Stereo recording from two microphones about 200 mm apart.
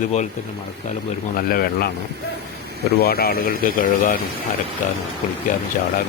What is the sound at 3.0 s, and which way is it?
Speech, 50° left (ahead or behind).